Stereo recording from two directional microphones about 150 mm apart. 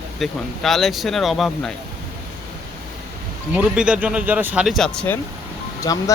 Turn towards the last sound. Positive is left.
turn(degrees=20)  # may be behind; listen again after turning